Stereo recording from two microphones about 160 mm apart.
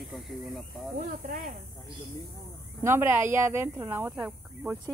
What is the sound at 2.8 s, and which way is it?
Speech, 15° right (ahead or behind).